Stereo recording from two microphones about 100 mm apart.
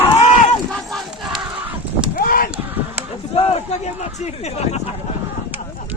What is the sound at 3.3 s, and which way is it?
Speech, 90° left.